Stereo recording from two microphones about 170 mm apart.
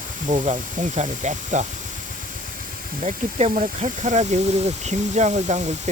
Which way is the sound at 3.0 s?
40° right (ahead or behind).